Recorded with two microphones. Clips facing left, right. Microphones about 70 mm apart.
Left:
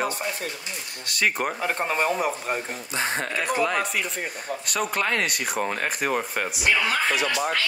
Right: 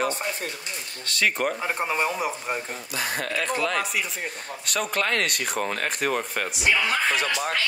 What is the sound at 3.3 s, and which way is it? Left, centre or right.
Speech, centre.